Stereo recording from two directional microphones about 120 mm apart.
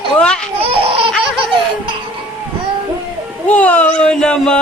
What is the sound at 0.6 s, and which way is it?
Laughter, 55° right (ahead or behind).